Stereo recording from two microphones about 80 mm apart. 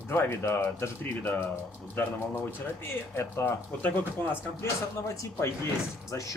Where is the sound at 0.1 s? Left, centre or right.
Left.